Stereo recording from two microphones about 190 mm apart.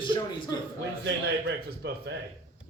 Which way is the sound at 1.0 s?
65° right (ahead or behind).